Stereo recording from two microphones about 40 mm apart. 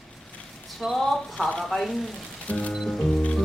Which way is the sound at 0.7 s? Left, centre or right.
Centre.